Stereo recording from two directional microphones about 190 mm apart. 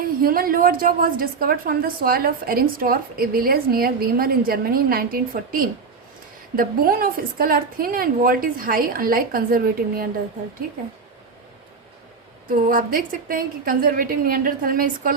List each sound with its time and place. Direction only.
0.0 s a woman's voice: 50° right (ahead or behind)
12.5 s a woman's voice: 50° right (ahead or behind)